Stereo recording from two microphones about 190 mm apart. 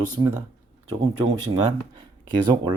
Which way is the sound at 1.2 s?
90° right.